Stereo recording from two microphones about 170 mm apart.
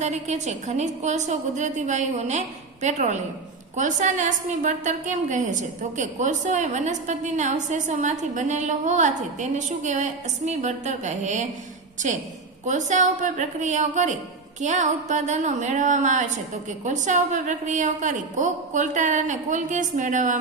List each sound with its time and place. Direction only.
0.0 s a woman's voice: 40° right (ahead or behind)